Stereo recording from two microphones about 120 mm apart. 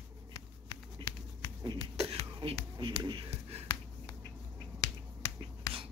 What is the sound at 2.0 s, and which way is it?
Beatboxing, 55° right (ahead or behind).